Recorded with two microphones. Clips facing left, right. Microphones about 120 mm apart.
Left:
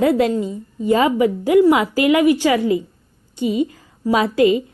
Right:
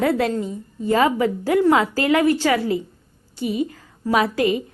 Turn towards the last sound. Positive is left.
turn(degrees=20)  # may be behind; listen again after turning